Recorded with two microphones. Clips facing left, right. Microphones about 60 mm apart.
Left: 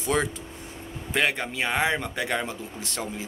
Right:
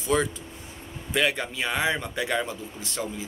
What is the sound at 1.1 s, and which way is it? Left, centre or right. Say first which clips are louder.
Speech: even; left.